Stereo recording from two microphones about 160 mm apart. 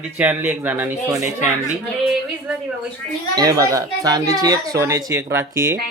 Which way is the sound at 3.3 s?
25° right (ahead or behind).